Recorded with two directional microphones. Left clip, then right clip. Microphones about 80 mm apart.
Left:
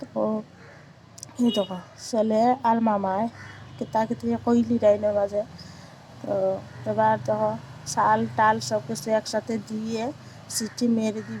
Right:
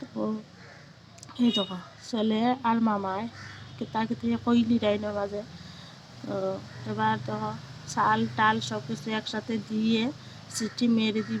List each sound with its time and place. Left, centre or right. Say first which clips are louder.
1.4 s a woman's voice: left 3 dB; left
6.8 s a woman's voice: left 7 dB; left